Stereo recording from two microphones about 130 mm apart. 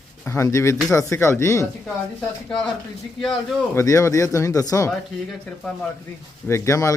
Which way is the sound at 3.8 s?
25° left (ahead or behind).